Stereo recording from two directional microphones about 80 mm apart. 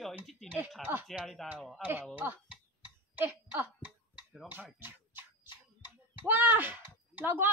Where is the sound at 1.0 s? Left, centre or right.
Centre.